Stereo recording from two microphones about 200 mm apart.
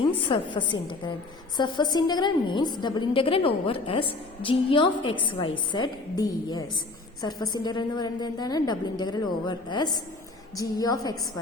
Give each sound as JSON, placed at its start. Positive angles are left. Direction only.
{"t": 0.3, "sound": "a woman's voice", "side_deg": 25}